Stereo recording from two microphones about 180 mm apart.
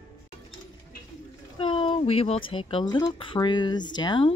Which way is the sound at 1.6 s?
30° left (ahead or behind).